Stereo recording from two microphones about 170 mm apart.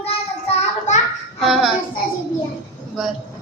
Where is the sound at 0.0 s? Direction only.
35° left (ahead or behind).